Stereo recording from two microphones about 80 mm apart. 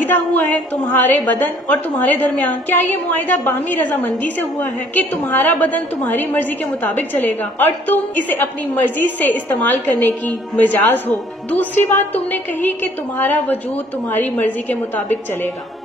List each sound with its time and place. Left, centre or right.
0.0 s a woman's voice: left
6.8 s a woman's voice: left